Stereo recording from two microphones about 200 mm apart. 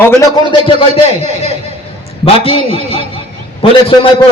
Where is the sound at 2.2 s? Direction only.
30° left (ahead or behind).